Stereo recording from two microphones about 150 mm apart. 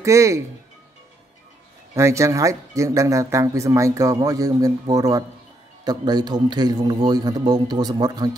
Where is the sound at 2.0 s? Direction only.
20° right (ahead or behind).